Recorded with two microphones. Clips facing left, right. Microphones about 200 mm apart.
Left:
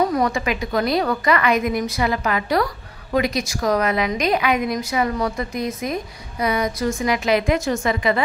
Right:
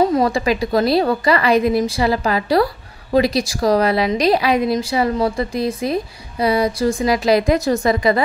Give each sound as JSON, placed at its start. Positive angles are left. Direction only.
{"t": 0.0, "sound": "a woman's voice", "side_deg": -25}